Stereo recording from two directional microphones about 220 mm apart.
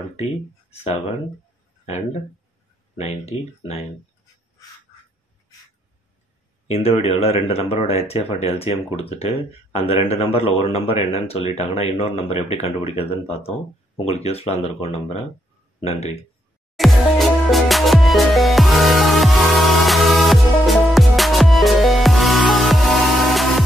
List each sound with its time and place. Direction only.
0.1 s speech: 30° left (ahead or behind)
3.0 s speech: 30° left (ahead or behind)
6.7 s speech: 30° left (ahead or behind)
16.7 s music: centre (ahead or behind)